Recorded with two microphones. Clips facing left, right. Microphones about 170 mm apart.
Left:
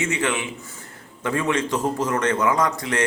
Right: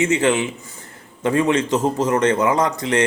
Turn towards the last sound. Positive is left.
turn(degrees=-20)  # may be behind; listen again after turning